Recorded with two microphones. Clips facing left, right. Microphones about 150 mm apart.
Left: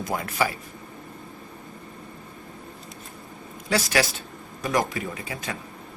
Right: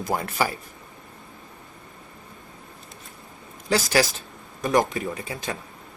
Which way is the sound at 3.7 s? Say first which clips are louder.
Right 2 dB; 30° right (ahead or behind).